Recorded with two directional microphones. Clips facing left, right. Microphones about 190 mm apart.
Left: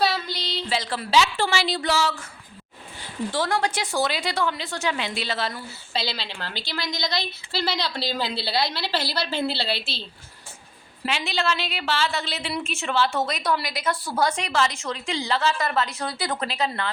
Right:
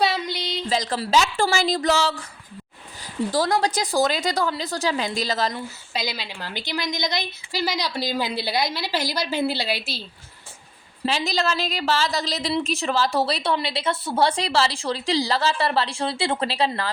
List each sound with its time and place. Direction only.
0.0 s a sound: 20° right (ahead or behind)
0.5 s a woman's voice: 40° right (ahead or behind)
3.3 s a woman's voice: 35° right (ahead or behind)
5.9 s a woman's voice: 10° right (ahead or behind)
11.0 s a woman's voice: 40° right (ahead or behind)